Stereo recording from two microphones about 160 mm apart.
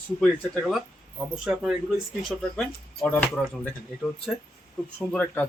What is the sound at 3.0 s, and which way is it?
Speech, 10° left (ahead or behind).